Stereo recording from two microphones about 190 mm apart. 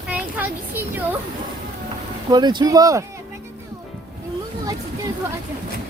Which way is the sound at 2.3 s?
20° right (ahead or behind).